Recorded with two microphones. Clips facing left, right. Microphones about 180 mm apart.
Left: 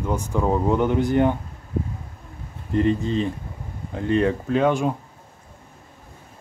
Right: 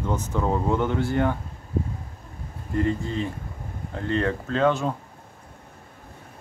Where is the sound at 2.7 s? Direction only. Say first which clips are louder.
Left 4 dB; 20° left (ahead or behind).